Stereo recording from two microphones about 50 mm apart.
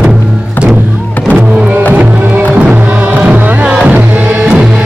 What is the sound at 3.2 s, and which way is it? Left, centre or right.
Music, right.